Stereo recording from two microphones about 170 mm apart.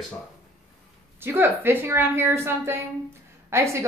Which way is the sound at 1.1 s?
15° right (ahead or behind).